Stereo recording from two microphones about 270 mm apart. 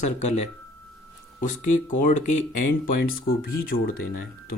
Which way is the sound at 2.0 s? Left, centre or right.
Left.